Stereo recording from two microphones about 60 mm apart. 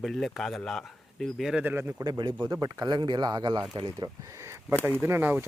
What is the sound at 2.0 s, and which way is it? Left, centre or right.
Speech, right.